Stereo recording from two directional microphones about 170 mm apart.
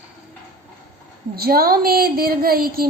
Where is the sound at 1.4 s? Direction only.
60° right (ahead or behind).